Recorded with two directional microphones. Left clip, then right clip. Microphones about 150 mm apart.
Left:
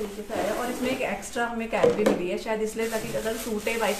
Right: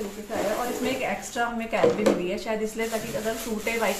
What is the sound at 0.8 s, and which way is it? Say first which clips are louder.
Speech: even; 15° left (ahead or behind).